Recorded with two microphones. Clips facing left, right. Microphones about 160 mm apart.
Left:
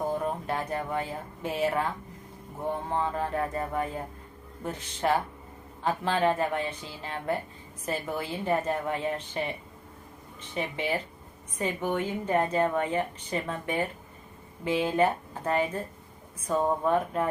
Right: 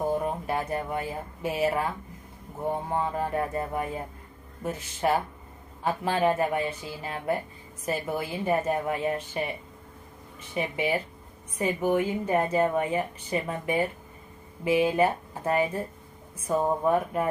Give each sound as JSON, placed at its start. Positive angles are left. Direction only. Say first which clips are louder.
{"t": 0.3, "sound": "speech", "louder": "right 2 dB", "side_deg": -10}
{"t": 2.9, "sound": "a woman's voice", "louder": "even", "side_deg": -10}
{"t": 10.5, "sound": "a woman's voice", "louder": "right 3 dB", "side_deg": -10}